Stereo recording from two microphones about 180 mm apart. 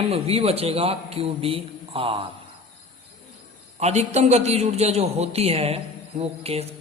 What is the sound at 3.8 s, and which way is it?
A man's voice, 35° right (ahead or behind).